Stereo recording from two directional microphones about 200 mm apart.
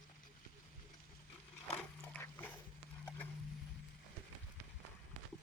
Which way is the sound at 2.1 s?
10° left (ahead or behind).